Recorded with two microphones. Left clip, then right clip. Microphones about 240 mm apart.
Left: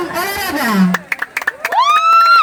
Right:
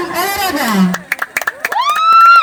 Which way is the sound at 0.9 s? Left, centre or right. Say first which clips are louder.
Right 1 dB; right.